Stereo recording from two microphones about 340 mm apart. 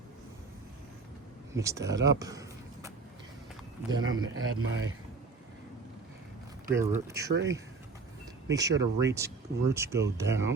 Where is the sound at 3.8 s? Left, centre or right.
Right.